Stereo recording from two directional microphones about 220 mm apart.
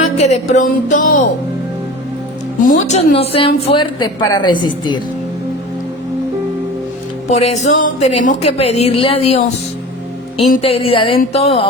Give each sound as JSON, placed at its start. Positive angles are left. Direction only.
{"t": 0.0, "sound": "music", "side_deg": 30}
{"t": 2.6, "sound": "speech", "side_deg": 35}
{"t": 7.3, "sound": "speech", "side_deg": 30}
{"t": 10.6, "sound": "speech", "side_deg": 25}